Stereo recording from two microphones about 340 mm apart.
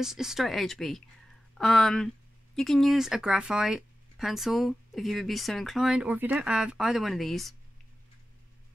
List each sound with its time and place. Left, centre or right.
0.0 s speech: centre